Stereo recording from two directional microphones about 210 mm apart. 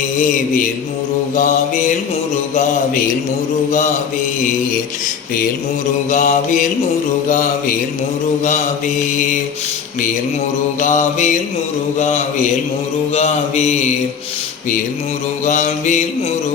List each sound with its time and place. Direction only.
0.2 s mantra: 40° left (ahead or behind)
6.1 s mantra: 35° left (ahead or behind)
10.8 s mantra: 35° left (ahead or behind)
15.4 s mantra: 35° left (ahead or behind)